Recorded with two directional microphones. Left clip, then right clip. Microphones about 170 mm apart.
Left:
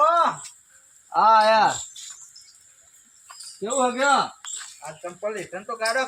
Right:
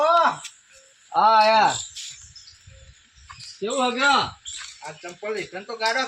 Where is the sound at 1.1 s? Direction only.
20° right (ahead or behind).